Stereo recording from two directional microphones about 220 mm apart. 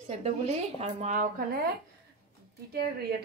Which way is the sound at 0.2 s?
30° right (ahead or behind).